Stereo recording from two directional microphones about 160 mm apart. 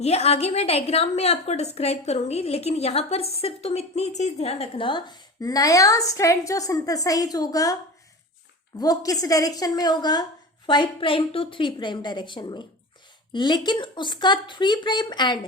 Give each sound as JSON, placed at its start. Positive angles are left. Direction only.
{"t": 0.0, "sound": "a woman's voice", "side_deg": 40}
{"t": 8.8, "sound": "a woman's voice", "side_deg": 25}